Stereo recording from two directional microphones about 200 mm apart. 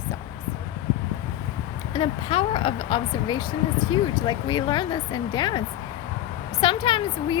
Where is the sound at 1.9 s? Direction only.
25° left (ahead or behind).